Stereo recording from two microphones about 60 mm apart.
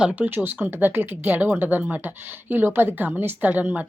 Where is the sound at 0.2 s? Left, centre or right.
Right.